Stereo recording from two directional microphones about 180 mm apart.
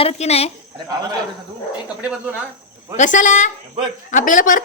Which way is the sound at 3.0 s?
45° left (ahead or behind).